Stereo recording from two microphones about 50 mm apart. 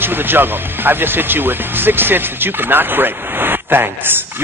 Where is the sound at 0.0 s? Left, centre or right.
Right.